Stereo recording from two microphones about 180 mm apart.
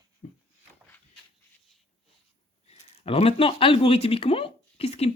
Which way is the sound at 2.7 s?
35° left (ahead or behind).